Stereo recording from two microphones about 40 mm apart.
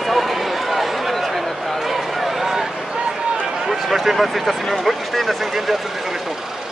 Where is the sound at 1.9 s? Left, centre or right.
Centre.